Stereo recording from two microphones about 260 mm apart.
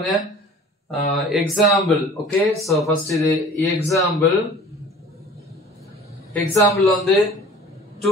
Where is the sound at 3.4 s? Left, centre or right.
Centre.